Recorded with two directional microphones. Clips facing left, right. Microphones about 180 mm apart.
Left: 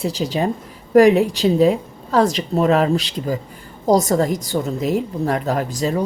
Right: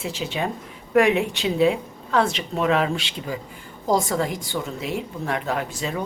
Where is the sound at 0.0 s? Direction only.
35° left (ahead or behind).